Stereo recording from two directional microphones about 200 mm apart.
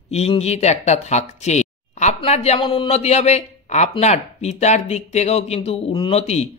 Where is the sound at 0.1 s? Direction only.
30° left (ahead or behind).